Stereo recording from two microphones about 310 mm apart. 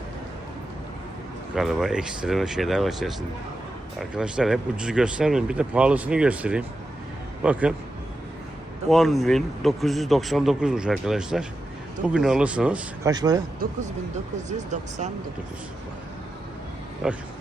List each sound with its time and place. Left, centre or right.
1.5 s a man's voice: centre
8.9 s a man's voice: centre
14.7 s speech: right